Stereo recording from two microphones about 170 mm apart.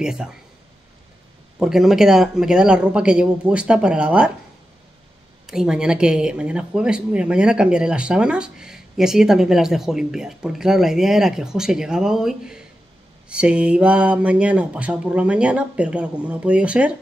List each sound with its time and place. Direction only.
0.0 s speech: 5° right (ahead or behind)
1.6 s speech: centre (ahead or behind)
5.5 s speech: 5° right (ahead or behind)